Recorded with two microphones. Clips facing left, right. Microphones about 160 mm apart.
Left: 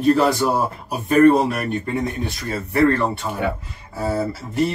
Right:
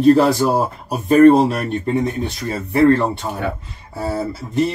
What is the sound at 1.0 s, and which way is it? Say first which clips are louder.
Speech: right 4 dB; 30° right (ahead or behind).